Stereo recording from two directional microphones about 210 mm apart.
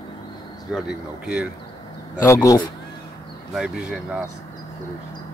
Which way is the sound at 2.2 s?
15° left (ahead or behind).